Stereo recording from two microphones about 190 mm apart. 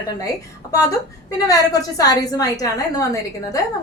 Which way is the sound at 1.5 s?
20° left (ahead or behind).